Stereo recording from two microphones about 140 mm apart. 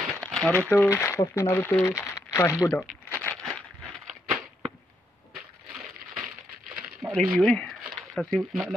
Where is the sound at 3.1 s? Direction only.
10° left (ahead or behind).